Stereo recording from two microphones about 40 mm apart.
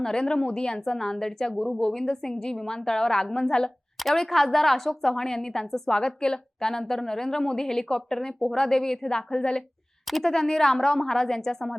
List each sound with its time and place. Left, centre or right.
0.0 s a woman's voice: left
4.0 s a woman's voice: centre
6.0 s a woman's voice: left
9.0 s a woman's voice: left
10.2 s a woman's voice: centre